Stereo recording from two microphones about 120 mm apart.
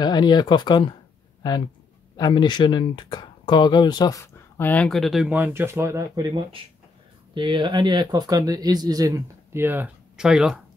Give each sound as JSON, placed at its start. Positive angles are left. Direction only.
{"t": 0.0, "sound": "speech", "side_deg": 35}
{"t": 2.1, "sound": "speech", "side_deg": 35}
{"t": 4.8, "sound": "speech", "side_deg": 0}
{"t": 5.3, "sound": "speech", "side_deg": -15}